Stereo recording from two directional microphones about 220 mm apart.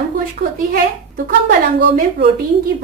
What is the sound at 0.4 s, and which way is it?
A woman's voice, 40° right (ahead or behind).